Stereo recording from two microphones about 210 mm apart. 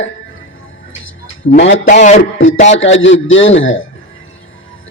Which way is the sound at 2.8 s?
65° left (ahead or behind).